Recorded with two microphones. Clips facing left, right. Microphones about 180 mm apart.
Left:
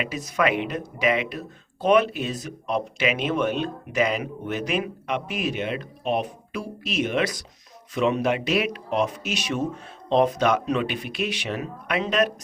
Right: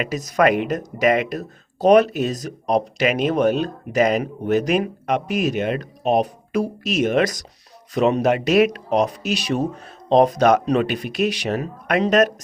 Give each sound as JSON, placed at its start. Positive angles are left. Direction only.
{"t": 0.0, "sound": "speech", "side_deg": -40}